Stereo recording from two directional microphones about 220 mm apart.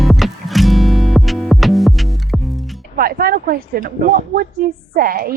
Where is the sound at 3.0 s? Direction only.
45° right (ahead or behind).